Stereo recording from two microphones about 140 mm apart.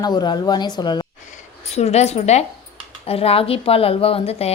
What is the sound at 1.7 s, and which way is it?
A woman's voice, 50° left (ahead or behind).